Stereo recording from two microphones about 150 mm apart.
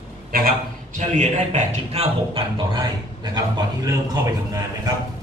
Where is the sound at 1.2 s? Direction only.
50° right (ahead or behind).